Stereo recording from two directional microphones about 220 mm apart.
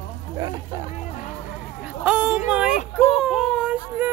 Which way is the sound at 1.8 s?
5° right (ahead or behind).